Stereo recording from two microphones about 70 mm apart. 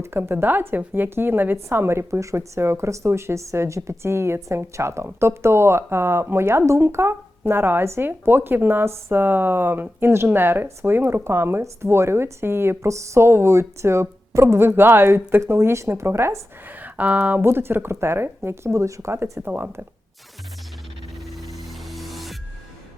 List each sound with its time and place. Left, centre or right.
0.0 s a woman's voice: right
16.7 s speech: right
17.4 s a woman's voice: right
19.1 s a woman's voice: right
19.5 s speech: right
21.2 s music: centre